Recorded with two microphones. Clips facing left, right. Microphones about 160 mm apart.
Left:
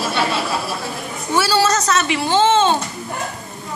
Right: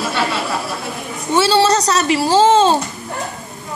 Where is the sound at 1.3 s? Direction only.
25° right (ahead or behind).